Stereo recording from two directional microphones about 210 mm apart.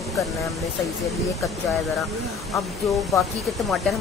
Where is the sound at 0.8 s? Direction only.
Centre (ahead or behind).